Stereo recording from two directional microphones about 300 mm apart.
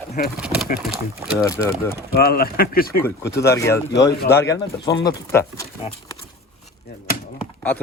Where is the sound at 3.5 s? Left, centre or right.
Centre.